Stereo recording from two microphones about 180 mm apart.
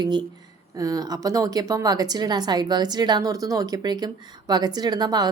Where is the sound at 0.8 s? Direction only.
20° right (ahead or behind).